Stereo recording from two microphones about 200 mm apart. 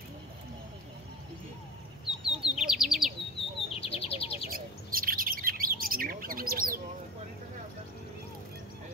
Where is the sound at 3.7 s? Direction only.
30° left (ahead or behind).